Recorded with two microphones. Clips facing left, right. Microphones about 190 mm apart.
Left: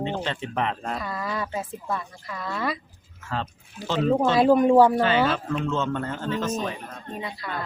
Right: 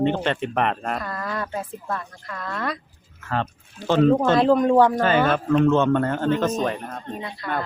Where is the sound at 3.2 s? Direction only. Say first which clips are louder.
Right 4 dB; 60° right (ahead or behind).